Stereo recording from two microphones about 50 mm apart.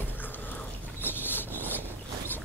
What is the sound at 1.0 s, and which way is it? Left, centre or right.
Rub, left.